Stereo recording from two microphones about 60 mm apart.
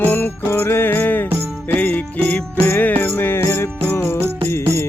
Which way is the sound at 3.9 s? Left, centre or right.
Left.